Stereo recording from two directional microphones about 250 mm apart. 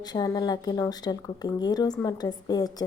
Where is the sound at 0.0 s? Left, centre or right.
Centre.